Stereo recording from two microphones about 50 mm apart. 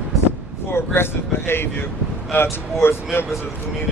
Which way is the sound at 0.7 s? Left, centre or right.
Left.